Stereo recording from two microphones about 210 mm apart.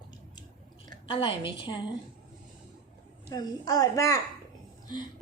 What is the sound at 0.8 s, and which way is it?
Speech, 25° left (ahead or behind).